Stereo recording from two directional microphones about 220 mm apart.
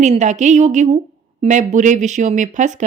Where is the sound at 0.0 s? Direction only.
30° right (ahead or behind).